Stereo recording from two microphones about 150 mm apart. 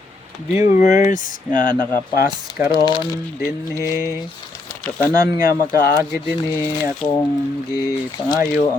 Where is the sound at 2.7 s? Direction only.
30° left (ahead or behind).